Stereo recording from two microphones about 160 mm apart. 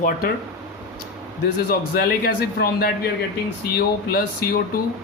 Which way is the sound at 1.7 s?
70° left (ahead or behind).